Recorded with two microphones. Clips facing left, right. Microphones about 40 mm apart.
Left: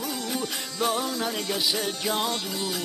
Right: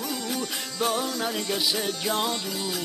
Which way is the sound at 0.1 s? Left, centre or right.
Centre.